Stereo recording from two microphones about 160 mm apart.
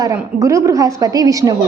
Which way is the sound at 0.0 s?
20° right (ahead or behind).